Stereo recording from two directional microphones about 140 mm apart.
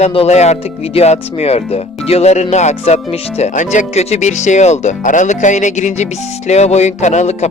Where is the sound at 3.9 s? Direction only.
50° left (ahead or behind).